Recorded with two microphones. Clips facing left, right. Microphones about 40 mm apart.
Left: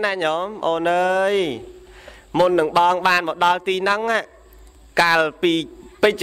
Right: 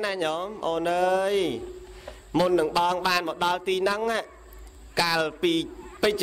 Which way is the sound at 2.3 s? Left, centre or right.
Left.